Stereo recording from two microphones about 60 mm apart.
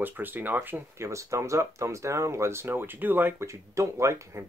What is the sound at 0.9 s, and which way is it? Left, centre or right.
Speech, right.